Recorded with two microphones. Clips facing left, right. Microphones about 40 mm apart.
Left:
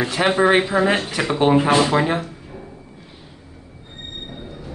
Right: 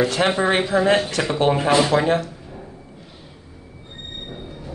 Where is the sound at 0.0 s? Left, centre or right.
Centre.